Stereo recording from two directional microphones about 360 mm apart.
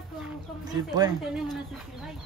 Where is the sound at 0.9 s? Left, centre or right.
Centre.